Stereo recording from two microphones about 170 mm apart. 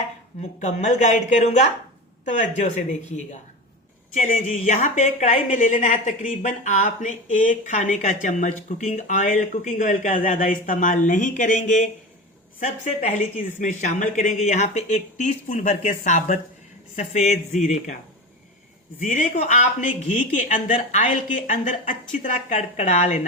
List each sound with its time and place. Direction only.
0.6 s speech: 45° left (ahead or behind)
4.1 s speech: 45° left (ahead or behind)
18.9 s speech: 50° left (ahead or behind)